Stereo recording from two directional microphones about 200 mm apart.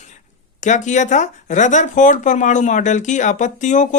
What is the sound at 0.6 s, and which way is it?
Speech, 35° left (ahead or behind).